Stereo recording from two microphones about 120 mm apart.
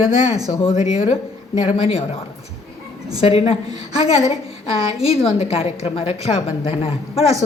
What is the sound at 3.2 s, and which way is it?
Speech, 55° left (ahead or behind).